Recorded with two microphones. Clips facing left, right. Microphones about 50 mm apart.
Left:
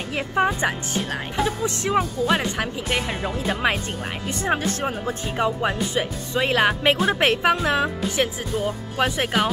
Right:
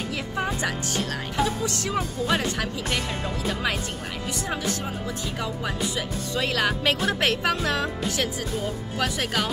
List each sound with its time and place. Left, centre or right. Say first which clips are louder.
0.5 s speech: left 3 dB; left
4.5 s speech: left 8 dB; left